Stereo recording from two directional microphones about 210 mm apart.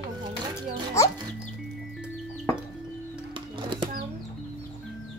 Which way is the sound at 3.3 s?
20° right (ahead or behind).